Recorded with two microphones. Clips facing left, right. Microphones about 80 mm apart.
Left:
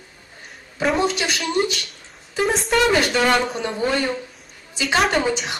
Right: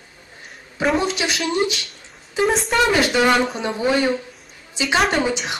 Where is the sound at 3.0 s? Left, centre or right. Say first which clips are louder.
Right 2 dB; centre.